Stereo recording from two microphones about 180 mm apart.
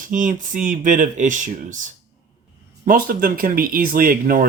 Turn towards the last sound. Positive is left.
turn(degrees=-50)  # may be behind; listen again after turning